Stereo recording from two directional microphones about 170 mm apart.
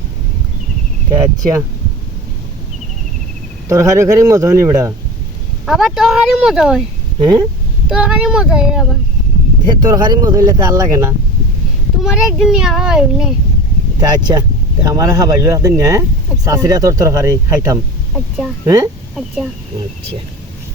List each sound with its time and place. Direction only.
1.1 s speech: 20° right (ahead or behind)
3.7 s speech: 20° right (ahead or behind)
5.6 s a child's voice: centre (ahead or behind)
7.9 s a child's voice: 5° right (ahead or behind)
9.6 s speech: 25° right (ahead or behind)
12.0 s a child's voice: centre (ahead or behind)
14.0 s speech: 25° right (ahead or behind)
18.1 s speech: centre (ahead or behind)
18.6 s speech: 20° right (ahead or behind)